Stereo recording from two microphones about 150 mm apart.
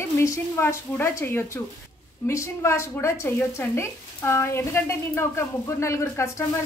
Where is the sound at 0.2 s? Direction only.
20° left (ahead or behind).